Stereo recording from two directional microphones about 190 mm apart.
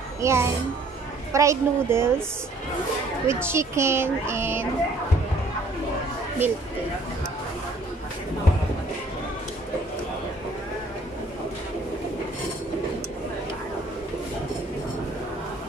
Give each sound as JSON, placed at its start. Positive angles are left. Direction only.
{"t": 0.2, "sound": "speech", "side_deg": -15}
{"t": 3.3, "sound": "speech", "side_deg": -15}